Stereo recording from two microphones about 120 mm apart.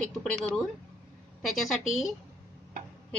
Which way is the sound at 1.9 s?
Centre (ahead or behind).